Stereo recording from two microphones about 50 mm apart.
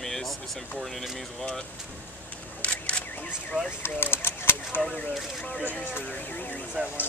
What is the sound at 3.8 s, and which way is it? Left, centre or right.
Speech, left.